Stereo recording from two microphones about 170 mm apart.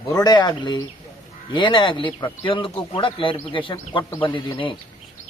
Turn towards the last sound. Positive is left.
turn(degrees=30)  # may be behind; listen again after turning